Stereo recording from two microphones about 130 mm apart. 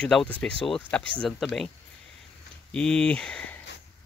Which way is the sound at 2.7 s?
5° left (ahead or behind).